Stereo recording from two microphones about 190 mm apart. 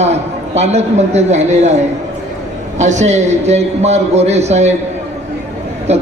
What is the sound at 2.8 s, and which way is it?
A man's voice, 40° right (ahead or behind).